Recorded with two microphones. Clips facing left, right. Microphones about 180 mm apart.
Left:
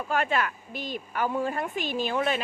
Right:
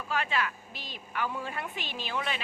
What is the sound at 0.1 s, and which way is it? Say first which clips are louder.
A woman's voice: left 4 dB; 50° left (ahead or behind).